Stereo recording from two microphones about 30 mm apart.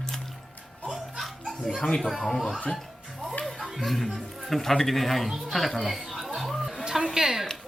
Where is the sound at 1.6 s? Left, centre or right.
Left.